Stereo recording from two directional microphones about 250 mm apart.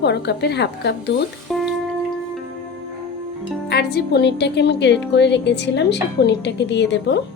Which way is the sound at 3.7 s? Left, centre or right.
Left.